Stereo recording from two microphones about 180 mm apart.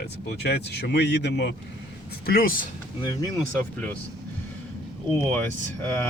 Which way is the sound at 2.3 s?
55° left (ahead or behind).